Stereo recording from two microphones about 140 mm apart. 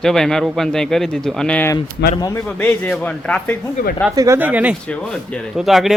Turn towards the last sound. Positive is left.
turn(degrees=0)  # may be behind; listen again after turning